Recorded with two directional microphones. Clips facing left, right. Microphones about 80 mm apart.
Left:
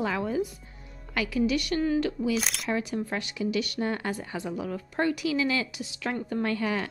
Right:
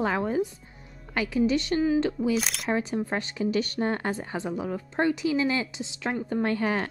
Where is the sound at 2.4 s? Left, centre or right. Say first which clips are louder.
Right 1 dB; centre.